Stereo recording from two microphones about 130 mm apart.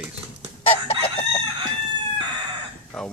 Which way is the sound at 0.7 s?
45° left (ahead or behind).